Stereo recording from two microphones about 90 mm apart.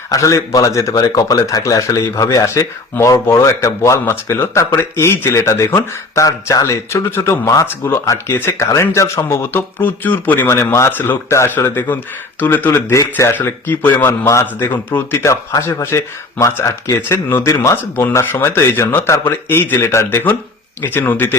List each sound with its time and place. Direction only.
0.1 s speech: 35° left (ahead or behind); by 12.8 s 20° left (ahead or behind)
12.9 s speech: 35° left (ahead or behind)